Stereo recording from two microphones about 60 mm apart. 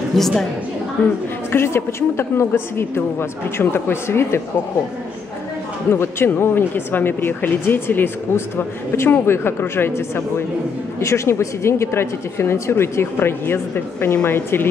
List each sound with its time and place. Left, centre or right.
0.2 s a woman's voice: centre
1.0 s speech: left
1.5 s speech: left
5.9 s speech: left
11.0 s speech: left
14.0 s speech: left
14.3 s speech: left